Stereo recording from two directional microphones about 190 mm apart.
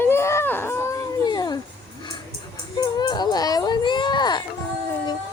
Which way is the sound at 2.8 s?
20° left (ahead or behind).